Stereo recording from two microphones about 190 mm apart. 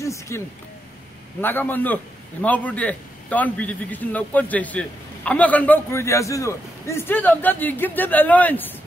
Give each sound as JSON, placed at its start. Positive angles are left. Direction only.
{"t": 0.0, "sound": "speech", "side_deg": 15}
{"t": 1.4, "sound": "a man's voice", "side_deg": 10}